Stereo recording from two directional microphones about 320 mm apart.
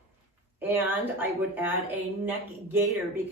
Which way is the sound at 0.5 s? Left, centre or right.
Centre.